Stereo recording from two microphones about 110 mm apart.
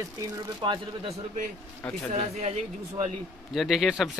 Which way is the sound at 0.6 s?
45° right (ahead or behind).